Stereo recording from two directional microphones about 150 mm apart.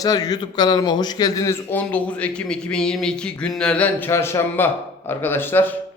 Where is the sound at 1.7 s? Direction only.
10° left (ahead or behind).